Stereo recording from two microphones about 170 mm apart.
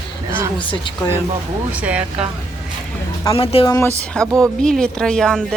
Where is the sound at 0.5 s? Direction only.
30° left (ahead or behind).